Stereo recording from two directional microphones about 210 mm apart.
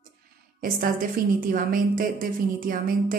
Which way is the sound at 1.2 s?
45° right (ahead or behind).